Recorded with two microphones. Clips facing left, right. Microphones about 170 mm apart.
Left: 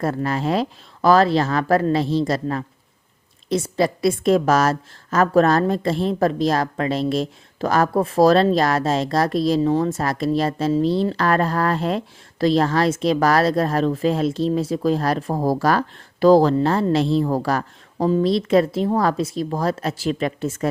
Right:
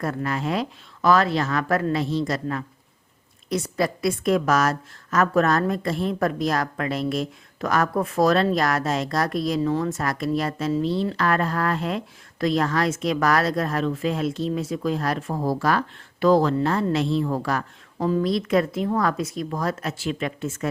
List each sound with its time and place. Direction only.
0.0 s a woman's voice: 30° left (ahead or behind)